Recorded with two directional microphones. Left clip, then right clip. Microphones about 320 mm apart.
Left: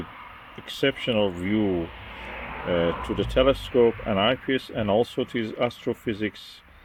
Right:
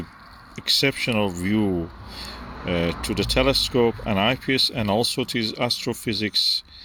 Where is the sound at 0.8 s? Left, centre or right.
Centre.